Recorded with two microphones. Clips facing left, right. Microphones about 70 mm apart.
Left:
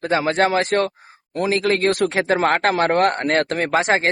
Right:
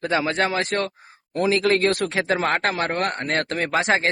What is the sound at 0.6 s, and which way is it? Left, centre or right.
Speech, left.